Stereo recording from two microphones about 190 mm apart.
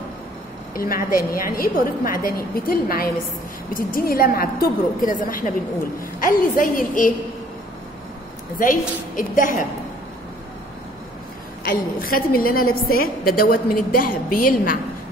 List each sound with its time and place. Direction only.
0.7 s a woman's voice: 50° left (ahead or behind)
8.5 s a woman's voice: 45° left (ahead or behind)
11.6 s a woman's voice: 50° left (ahead or behind)